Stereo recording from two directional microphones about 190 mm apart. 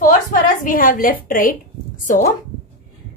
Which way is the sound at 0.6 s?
45° left (ahead or behind).